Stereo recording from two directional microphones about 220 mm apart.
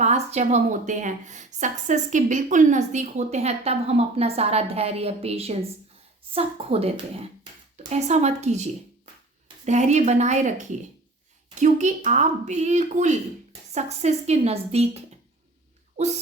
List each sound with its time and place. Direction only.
0.0 s a woman's voice: 30° right (ahead or behind)